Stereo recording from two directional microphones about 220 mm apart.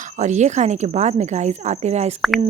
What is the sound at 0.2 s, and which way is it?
Speech, 30° right (ahead or behind).